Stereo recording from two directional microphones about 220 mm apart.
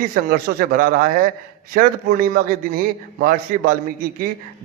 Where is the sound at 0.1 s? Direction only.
40° right (ahead or behind).